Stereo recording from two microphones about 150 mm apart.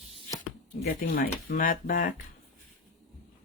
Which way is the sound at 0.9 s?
75° left (ahead or behind).